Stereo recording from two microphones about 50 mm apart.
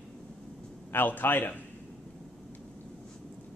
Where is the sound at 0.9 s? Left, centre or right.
Left.